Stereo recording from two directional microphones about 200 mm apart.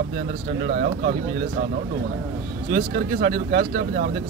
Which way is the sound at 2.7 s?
55° right (ahead or behind).